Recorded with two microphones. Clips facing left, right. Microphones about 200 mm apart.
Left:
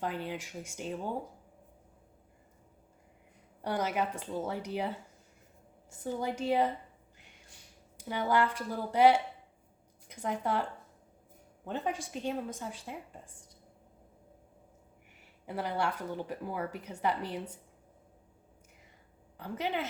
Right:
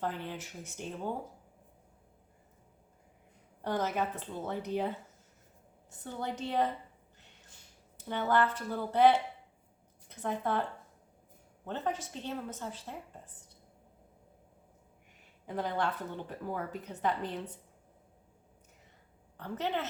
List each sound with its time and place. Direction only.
0.0 s a woman's voice: 15° left (ahead or behind)
3.6 s a woman's voice: 10° left (ahead or behind)
6.0 s a woman's voice: 10° left (ahead or behind)
7.9 s a woman's voice: 10° left (ahead or behind)
11.6 s a woman's voice: 10° left (ahead or behind)
15.4 s a woman's voice: 10° left (ahead or behind)
19.4 s a woman's voice: 10° left (ahead or behind)